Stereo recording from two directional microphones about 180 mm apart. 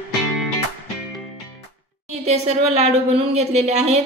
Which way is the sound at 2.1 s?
35° right (ahead or behind).